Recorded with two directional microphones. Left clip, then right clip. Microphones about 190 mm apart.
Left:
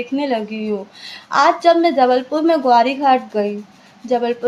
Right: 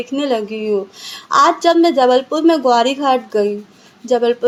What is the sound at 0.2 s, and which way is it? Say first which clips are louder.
A woman's voice: right 4 dB; 25° right (ahead or behind).